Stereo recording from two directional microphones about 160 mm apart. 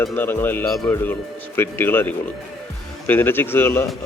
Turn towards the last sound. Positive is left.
turn(degrees=15)  # may be behind; listen again after turning